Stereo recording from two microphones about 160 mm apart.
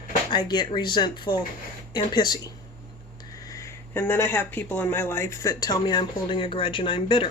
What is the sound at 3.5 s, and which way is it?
Speech, 20° left (ahead or behind).